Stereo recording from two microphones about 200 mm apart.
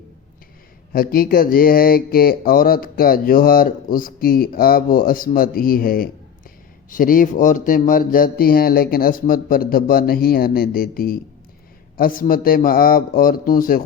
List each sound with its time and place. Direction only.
0.9 s speech: 50° left (ahead or behind)